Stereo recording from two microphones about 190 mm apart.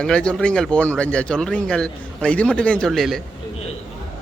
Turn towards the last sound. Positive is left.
turn(degrees=0)  # may be behind; listen again after turning